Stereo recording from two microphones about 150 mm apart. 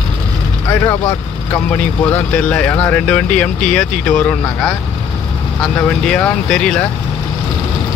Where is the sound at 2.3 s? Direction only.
10° left (ahead or behind).